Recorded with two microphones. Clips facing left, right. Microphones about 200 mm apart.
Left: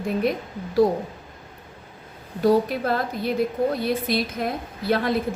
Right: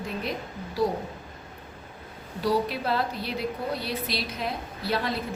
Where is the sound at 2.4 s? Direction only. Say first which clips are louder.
Left 6 dB; 50° left (ahead or behind).